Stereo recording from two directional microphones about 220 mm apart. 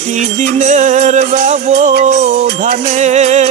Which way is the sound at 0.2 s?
30° right (ahead or behind).